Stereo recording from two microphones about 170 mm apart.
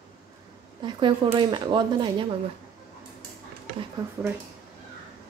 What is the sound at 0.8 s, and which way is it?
A woman's voice, 30° right (ahead or behind).